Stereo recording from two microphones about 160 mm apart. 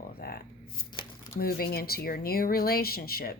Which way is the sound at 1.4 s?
70° left (ahead or behind).